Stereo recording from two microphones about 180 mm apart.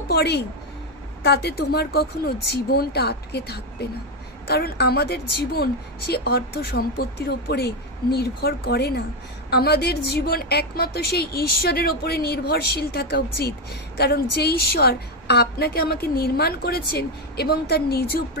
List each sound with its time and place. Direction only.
0.1 s a woman's voice: 65° left (ahead or behind)